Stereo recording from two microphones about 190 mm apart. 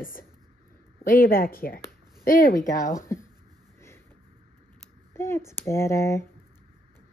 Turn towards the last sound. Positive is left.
turn(degrees=15)  # may be behind; listen again after turning